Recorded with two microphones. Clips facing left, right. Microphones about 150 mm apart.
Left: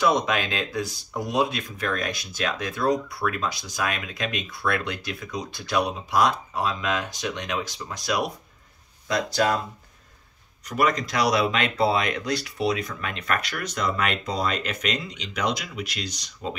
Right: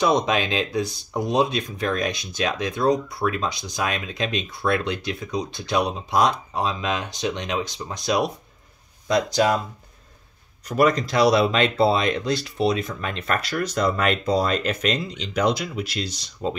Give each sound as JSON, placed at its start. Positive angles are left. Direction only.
{"t": 0.0, "sound": "speech", "side_deg": -20}
{"t": 10.7, "sound": "speech", "side_deg": -35}